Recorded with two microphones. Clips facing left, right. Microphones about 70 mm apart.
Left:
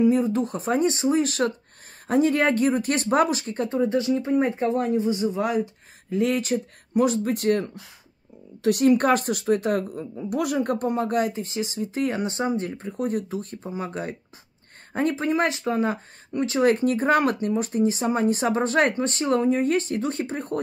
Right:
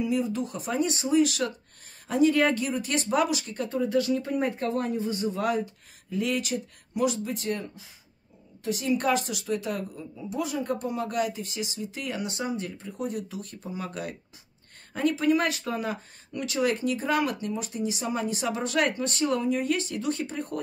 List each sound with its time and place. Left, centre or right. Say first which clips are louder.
0.0 s speech: left 7 dB; left; by 5.6 s centre
6.0 s speech: left 5 dB; left